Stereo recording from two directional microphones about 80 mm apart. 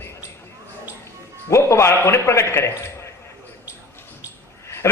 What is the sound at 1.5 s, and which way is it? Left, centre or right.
A man's voice, left.